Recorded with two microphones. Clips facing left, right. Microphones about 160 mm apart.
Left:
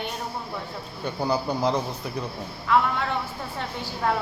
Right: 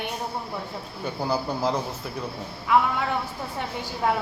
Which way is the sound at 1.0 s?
5° right (ahead or behind).